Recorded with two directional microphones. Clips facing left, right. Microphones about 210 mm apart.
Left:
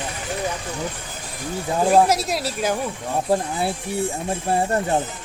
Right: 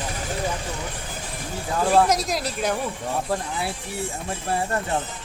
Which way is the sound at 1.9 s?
10° left (ahead or behind).